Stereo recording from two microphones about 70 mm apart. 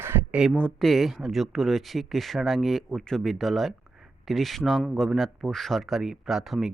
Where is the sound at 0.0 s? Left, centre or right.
Right.